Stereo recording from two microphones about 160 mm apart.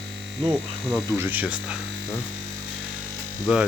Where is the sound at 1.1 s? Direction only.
10° right (ahead or behind).